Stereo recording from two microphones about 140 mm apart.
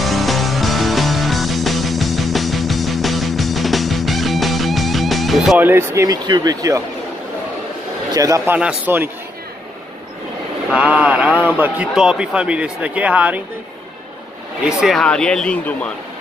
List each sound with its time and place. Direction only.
0.0 s music: centre (ahead or behind)
5.6 s speech: 15° right (ahead or behind)
8.1 s speech: 25° right (ahead or behind)
8.5 s a man's voice: 10° right (ahead or behind)
10.7 s a man's voice: 10° right (ahead or behind)
14.6 s speech: 5° right (ahead or behind)